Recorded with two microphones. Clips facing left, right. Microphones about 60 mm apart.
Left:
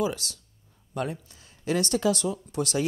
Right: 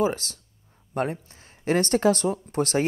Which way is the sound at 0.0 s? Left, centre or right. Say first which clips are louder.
Right 4 dB; right.